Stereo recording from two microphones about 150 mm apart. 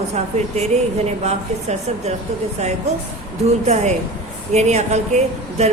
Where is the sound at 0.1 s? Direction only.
45° right (ahead or behind).